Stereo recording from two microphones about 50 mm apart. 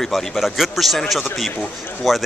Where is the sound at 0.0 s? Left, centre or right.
Centre.